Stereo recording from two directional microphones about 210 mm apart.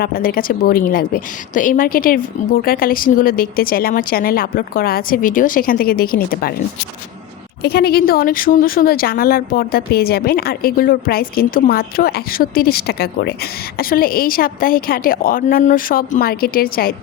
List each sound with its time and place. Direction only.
0.0 s speech: 45° left (ahead or behind)
7.6 s speech: 50° left (ahead or behind)